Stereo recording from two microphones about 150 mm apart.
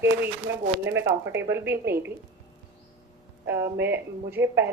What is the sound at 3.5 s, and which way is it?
A woman's voice, 15° right (ahead or behind).